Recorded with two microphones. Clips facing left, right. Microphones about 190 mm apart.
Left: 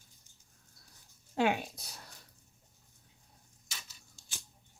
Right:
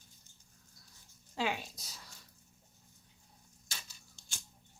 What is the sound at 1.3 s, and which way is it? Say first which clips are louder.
Speech: left 6 dB; 55° left (ahead or behind).